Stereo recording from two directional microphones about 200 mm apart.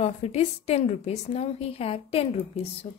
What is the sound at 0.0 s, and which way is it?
A woman's voice, 30° left (ahead or behind).